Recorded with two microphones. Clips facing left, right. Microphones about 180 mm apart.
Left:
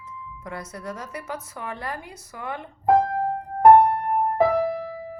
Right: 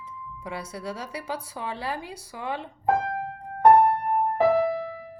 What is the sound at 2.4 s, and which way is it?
Speech, 20° right (ahead or behind).